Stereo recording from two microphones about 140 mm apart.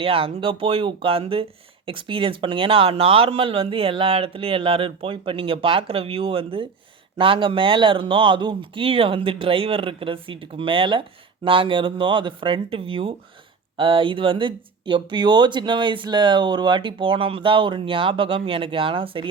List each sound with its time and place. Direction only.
0.0 s speech: 40° right (ahead or behind)